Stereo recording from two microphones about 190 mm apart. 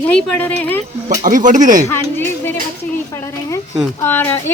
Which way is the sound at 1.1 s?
40° right (ahead or behind).